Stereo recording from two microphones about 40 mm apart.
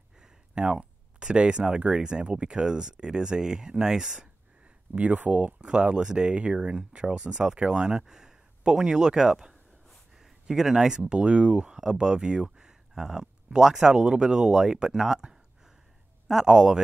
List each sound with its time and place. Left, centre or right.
0.2 s speech: centre
4.6 s speech: right; by 11.1 s centre
11.1 s speech: right